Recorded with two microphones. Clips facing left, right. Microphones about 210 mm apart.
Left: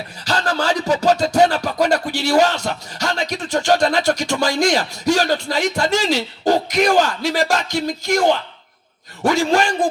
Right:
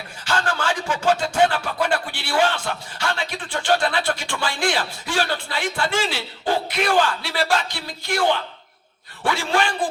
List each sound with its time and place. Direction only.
0.3 s music: 40° left (ahead or behind)
9.2 s a man's voice: 40° left (ahead or behind)